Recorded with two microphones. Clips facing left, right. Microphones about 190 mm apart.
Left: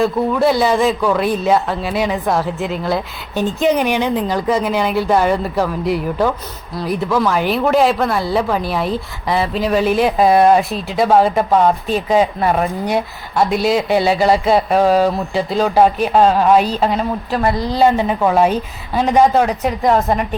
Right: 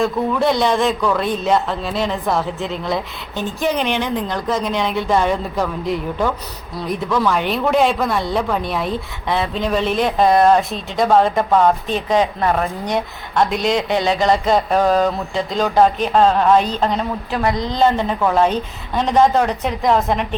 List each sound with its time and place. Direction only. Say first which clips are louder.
0.0 s a woman's voice: left 3 dB; 5° left (ahead or behind)